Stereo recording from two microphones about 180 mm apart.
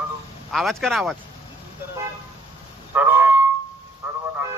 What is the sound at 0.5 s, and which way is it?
Speech, centre (ahead or behind).